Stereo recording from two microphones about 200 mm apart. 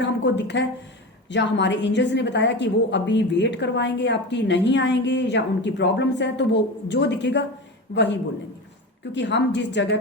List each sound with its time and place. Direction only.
0.0 s a woman's voice: 60° left (ahead or behind)
9.1 s a woman's voice: 60° left (ahead or behind)